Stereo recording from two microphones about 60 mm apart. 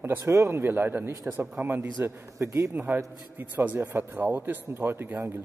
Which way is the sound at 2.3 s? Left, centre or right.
Right.